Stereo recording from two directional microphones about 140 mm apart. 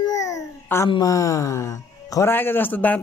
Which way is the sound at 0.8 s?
25° left (ahead or behind).